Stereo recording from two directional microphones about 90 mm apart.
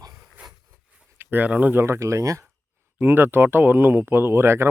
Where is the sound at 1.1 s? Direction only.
20° right (ahead or behind).